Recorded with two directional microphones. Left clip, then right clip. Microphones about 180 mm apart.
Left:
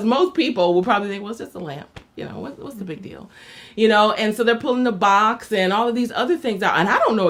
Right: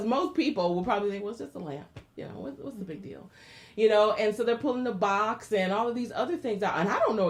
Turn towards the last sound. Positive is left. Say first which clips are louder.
# left 9 dB
turn(degrees=35)  # may be behind; listen again after turning